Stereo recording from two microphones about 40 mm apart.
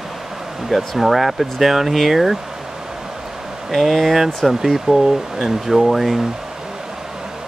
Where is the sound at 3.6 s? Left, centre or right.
Centre.